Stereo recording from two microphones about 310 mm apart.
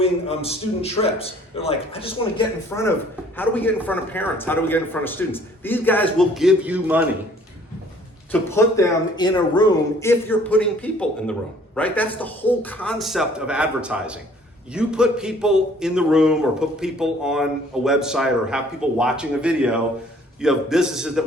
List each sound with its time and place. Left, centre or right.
0.0 s a man's voice: centre
8.3 s speech: centre